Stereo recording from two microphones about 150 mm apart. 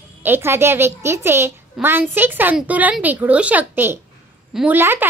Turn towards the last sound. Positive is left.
turn(degrees=-15)  # may be behind; listen again after turning